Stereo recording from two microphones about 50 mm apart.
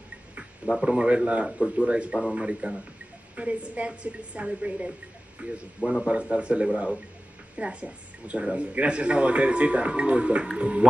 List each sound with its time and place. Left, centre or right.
0.7 s speech: centre